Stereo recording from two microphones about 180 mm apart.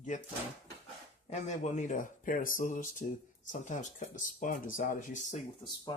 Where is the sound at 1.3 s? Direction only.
40° left (ahead or behind).